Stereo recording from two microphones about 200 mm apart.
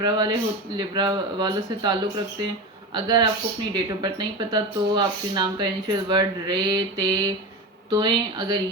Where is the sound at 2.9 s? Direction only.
20° right (ahead or behind).